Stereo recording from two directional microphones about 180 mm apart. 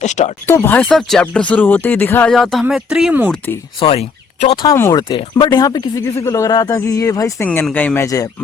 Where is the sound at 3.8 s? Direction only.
30° left (ahead or behind).